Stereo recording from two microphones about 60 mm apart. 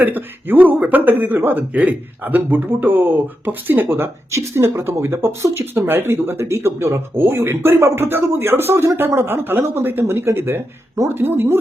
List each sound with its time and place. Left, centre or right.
0.0 s speech: right